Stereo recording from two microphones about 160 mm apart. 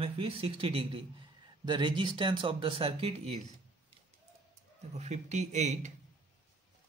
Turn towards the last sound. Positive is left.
turn(degrees=-50)  # may be behind; listen again after turning